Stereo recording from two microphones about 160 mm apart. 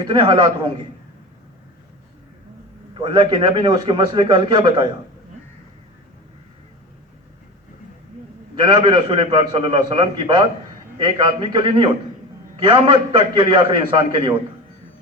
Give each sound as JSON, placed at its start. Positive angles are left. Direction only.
{"t": 0.0, "sound": "a man's voice", "side_deg": -25}
{"t": 2.9, "sound": "a man's voice", "side_deg": -30}
{"t": 8.5, "sound": "a man's voice", "side_deg": -30}